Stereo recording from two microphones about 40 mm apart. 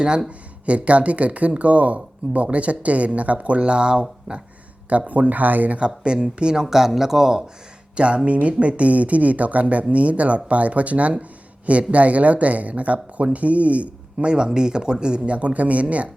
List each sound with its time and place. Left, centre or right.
0.3 s speech: right
4.9 s speech: right
5.7 s speech: right
7.9 s speech: right